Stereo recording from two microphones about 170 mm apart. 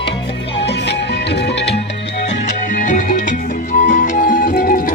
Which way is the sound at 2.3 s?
50° left (ahead or behind).